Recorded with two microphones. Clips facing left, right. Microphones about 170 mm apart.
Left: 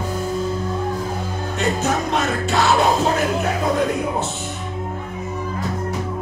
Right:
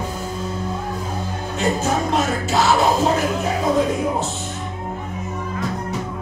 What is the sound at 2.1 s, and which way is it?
Music, centre (ahead or behind).